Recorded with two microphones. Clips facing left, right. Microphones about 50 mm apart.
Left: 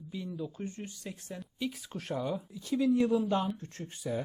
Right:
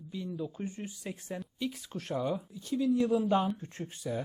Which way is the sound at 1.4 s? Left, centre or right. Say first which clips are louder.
Even; centre.